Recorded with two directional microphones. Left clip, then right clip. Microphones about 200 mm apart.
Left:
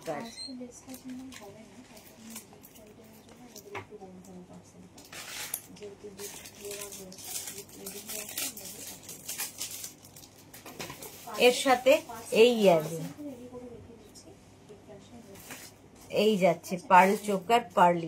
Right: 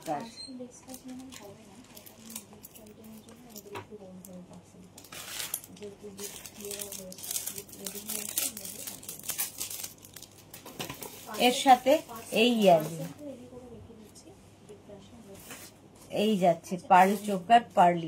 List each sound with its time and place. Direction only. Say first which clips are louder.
11.3 s a woman's voice: right 1 dB; 20° left (ahead or behind)
16.1 s a woman's voice: left 1 dB; 20° left (ahead or behind)